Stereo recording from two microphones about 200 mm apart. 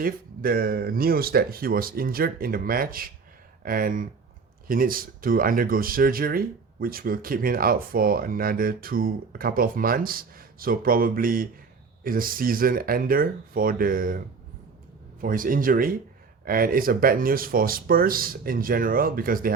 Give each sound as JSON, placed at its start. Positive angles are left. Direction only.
{"t": 0.0, "sound": "speech", "side_deg": -45}